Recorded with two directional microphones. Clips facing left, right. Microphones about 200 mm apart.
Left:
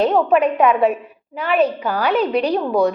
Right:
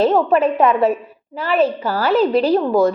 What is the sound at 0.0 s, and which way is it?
A woman's voice, centre (ahead or behind).